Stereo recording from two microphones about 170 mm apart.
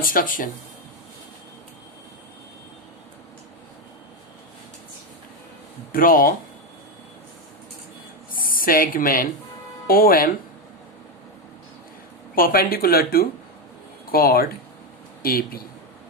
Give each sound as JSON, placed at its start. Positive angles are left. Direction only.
{"t": 0.0, "sound": "speech", "side_deg": 55}
{"t": 5.9, "sound": "speech", "side_deg": 55}
{"t": 8.3, "sound": "speech", "side_deg": 55}
{"t": 12.3, "sound": "speech", "side_deg": 55}